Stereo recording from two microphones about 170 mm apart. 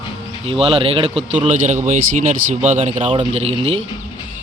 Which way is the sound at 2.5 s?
45° right (ahead or behind).